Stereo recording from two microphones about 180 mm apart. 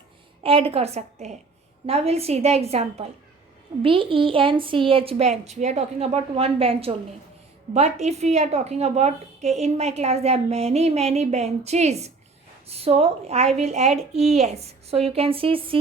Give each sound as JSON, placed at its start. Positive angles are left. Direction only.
{"t": 0.4, "sound": "a woman's voice", "side_deg": -30}